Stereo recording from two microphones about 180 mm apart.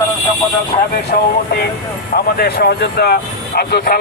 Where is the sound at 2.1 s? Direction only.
60° left (ahead or behind).